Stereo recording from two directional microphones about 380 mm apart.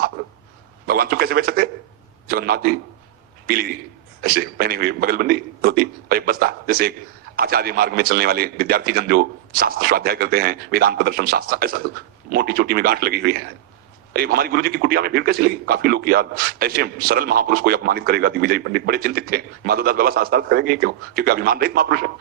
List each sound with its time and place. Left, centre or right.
0.9 s a man's voice: right